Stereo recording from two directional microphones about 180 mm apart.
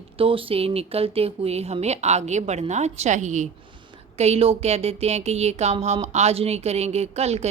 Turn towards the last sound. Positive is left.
turn(degrees=-35)  # may be behind; listen again after turning